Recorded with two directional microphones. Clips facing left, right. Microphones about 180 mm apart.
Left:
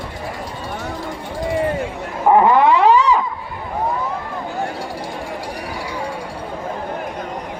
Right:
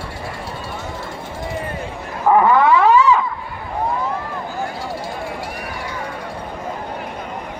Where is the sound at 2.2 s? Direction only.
20° left (ahead or behind).